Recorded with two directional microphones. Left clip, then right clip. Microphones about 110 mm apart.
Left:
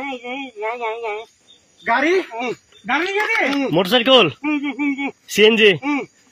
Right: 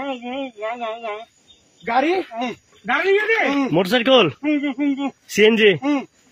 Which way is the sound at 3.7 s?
20° right (ahead or behind).